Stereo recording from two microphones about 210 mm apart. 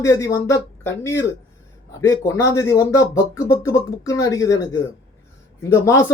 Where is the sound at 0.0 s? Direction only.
15° left (ahead or behind).